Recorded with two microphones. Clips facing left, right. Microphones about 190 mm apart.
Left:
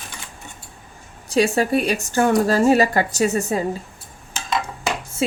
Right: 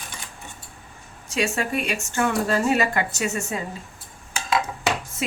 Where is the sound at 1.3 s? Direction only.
35° left (ahead or behind).